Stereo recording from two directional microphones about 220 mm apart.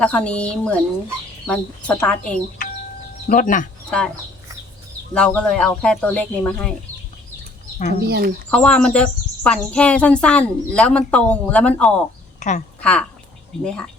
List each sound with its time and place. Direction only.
0.0 s speech: 5° left (ahead or behind)
3.2 s speech: 35° left (ahead or behind)
3.8 s speech: 5° left (ahead or behind)
5.1 s speech: 5° left (ahead or behind)
8.0 s speech: 45° right (ahead or behind)
8.4 s speech: 5° left (ahead or behind)
12.4 s speech: 35° left (ahead or behind)
12.8 s speech: 5° left (ahead or behind)